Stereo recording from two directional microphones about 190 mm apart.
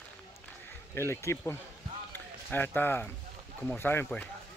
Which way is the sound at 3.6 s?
10° left (ahead or behind).